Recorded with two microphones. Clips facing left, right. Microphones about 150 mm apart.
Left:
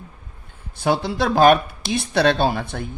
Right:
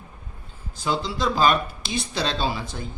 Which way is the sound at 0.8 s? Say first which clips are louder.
Left 5 dB; 60° left (ahead or behind).